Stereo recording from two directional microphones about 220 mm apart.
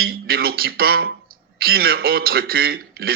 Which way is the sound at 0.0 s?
45° right (ahead or behind).